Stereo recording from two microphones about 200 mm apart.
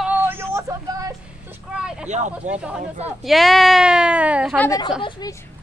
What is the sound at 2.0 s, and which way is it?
Speech, 35° right (ahead or behind).